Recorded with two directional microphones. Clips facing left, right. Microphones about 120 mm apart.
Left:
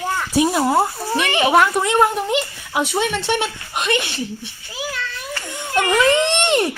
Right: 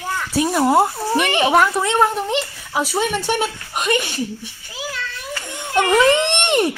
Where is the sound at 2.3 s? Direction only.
Centre (ahead or behind).